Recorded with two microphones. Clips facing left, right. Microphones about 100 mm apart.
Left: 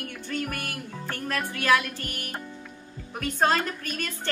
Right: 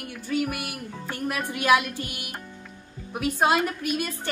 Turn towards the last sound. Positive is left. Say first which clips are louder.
# right 4 dB
turn(degrees=-10)  # may be behind; listen again after turning